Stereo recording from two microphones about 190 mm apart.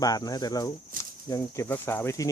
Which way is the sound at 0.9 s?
45° right (ahead or behind).